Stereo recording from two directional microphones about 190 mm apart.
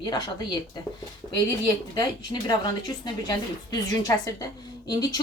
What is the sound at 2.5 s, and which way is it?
A woman's voice, 20° left (ahead or behind).